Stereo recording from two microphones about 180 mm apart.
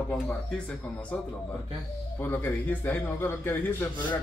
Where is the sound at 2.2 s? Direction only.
10° left (ahead or behind).